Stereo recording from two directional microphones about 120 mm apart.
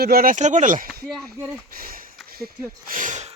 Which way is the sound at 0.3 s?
85° right.